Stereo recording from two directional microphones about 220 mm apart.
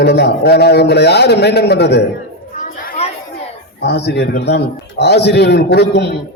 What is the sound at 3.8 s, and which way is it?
A man's voice, 50° left (ahead or behind).